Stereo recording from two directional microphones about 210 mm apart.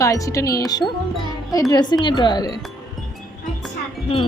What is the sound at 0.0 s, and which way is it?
Wind chime, 15° left (ahead or behind).